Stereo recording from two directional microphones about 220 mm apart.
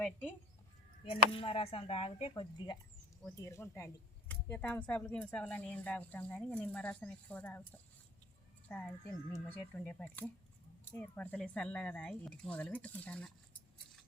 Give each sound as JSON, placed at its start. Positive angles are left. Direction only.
{"t": 0.0, "sound": "speech", "side_deg": 5}
{"t": 1.0, "sound": "a woman's voice", "side_deg": 25}